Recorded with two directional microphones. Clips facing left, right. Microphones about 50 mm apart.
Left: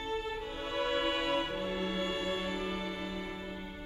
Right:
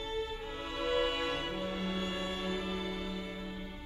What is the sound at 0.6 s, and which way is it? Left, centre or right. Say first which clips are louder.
Music: even; left.